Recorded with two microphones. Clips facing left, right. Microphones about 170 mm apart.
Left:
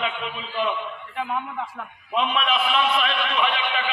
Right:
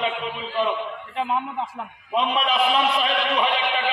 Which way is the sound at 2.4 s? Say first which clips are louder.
Right 3 dB; 35° right (ahead or behind).